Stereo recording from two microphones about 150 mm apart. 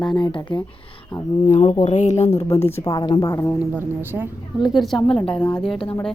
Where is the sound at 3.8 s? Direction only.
15° right (ahead or behind).